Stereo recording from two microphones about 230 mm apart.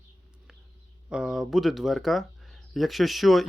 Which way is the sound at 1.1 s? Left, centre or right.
Centre.